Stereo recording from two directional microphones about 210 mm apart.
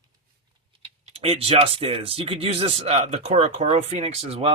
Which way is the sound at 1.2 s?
30° right (ahead or behind).